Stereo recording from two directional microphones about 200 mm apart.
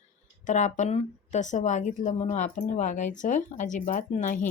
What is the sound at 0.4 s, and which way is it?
A woman's voice, 35° left (ahead or behind).